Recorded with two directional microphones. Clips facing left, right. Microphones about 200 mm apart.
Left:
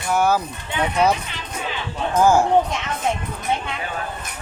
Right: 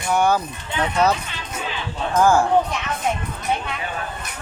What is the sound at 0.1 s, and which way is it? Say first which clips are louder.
Speech: even; 5° left (ahead or behind).